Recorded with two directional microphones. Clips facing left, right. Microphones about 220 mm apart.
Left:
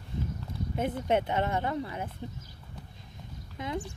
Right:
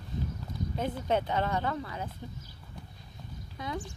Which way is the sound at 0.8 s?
25° left (ahead or behind).